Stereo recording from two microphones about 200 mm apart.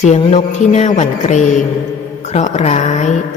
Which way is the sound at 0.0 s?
35° left (ahead or behind).